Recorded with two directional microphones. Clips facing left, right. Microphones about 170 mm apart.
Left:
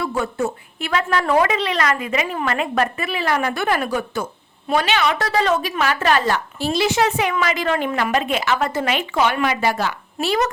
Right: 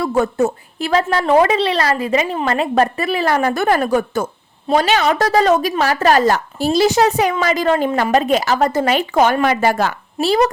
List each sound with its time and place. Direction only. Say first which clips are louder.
0.0 s a woman's voice: right 6 dB; 45° right (ahead or behind)
10.2 s a woman's voice: right 5 dB; 35° right (ahead or behind)